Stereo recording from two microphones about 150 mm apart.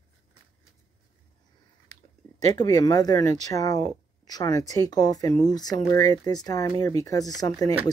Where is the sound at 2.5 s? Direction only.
25° left (ahead or behind).